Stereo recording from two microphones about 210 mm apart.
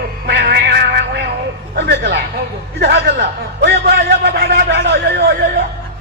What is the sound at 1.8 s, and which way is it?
Speech, 55° right (ahead or behind).